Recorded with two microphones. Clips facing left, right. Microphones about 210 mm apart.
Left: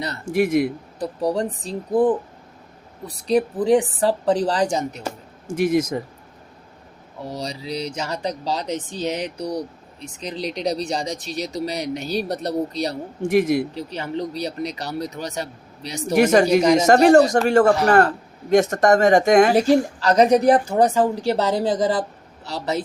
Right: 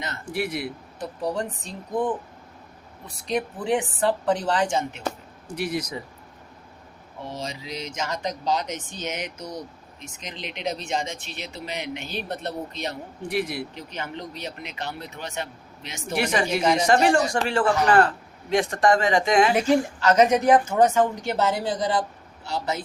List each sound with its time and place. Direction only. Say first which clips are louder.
0.0 s speech: left 8 dB; 40° left (ahead or behind)
7.3 s speech: left 5 dB; 35° left (ahead or behind)